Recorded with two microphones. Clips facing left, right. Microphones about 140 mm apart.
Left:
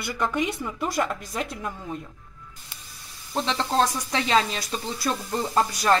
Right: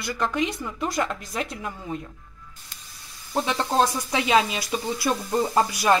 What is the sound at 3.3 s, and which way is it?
Speech, 10° right (ahead or behind).